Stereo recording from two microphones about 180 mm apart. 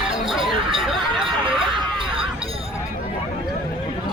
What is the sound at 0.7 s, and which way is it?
Snicker, centre (ahead or behind).